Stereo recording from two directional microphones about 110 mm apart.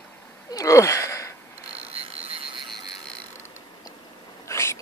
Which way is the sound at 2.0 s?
70° right (ahead or behind).